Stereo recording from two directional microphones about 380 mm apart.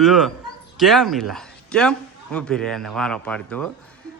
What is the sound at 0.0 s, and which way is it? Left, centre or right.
A man's voice, centre.